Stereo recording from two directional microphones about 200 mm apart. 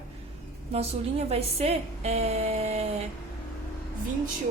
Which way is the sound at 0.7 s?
30° right (ahead or behind).